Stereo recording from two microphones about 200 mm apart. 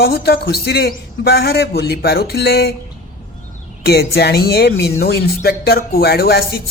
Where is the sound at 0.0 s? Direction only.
50° left (ahead or behind).